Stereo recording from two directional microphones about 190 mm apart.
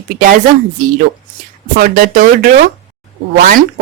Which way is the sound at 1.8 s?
50° right (ahead or behind).